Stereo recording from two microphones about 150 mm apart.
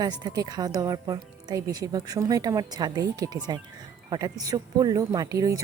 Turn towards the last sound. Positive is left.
turn(degrees=-20)  # may be behind; listen again after turning